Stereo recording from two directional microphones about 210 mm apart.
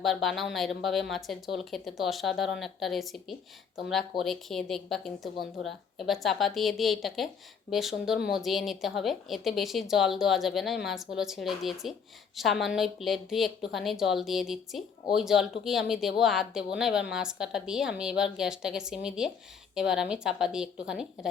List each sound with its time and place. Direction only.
0.0 s speech: centre (ahead or behind)